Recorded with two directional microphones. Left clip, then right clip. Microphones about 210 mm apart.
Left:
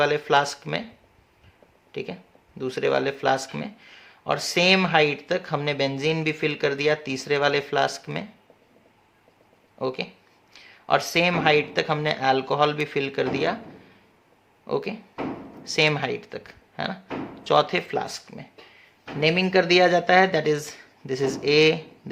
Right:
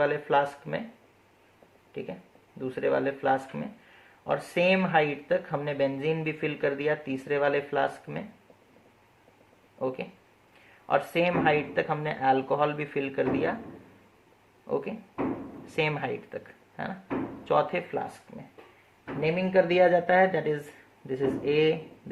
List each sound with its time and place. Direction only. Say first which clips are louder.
0.0 s speech: left 4 dB; 40° left (ahead or behind)
1.9 s speech: left 5 dB; 40° left (ahead or behind)
9.7 s speech: left 4 dB; 35° left (ahead or behind)
14.7 s speech: left 4 dB; 35° left (ahead or behind)
19.2 s speech: left 4 dB; 45° left (ahead or behind)